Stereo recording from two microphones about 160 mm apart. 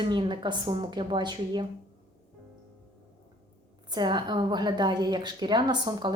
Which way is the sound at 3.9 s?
25° right (ahead or behind).